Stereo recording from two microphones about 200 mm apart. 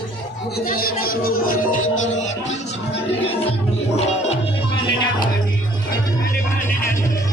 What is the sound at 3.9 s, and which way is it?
Music, 30° left (ahead or behind).